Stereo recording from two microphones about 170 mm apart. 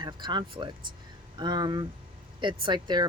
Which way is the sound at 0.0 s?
25° right (ahead or behind).